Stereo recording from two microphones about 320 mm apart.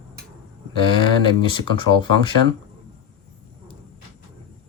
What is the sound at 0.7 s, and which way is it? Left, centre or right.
Speech, centre.